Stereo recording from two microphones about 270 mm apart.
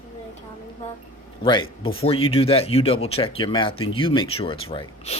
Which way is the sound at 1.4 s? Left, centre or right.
Centre.